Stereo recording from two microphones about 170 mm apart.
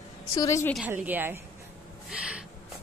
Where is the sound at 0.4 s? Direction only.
15° left (ahead or behind).